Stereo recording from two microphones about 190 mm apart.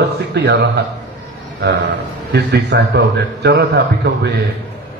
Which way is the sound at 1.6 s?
70° right (ahead or behind).